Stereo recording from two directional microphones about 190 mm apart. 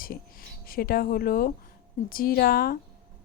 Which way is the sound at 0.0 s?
50° left (ahead or behind).